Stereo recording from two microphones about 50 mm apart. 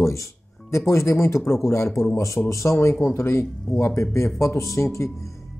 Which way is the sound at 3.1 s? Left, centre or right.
Left.